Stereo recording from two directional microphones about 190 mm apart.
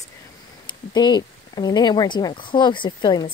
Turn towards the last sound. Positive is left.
turn(degrees=25)  # may be behind; listen again after turning